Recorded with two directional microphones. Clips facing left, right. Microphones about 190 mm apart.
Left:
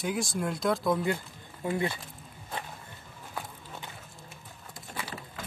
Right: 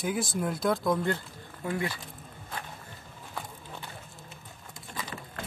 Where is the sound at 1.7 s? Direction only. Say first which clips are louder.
Left 2 dB; 25° left (ahead or behind).